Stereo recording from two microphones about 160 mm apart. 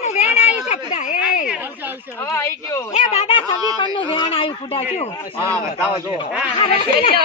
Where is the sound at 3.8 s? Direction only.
30° left (ahead or behind).